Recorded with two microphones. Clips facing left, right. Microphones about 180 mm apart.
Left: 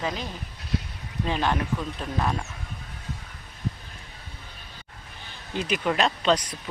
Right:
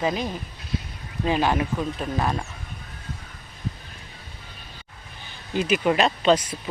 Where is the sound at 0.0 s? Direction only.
10° right (ahead or behind).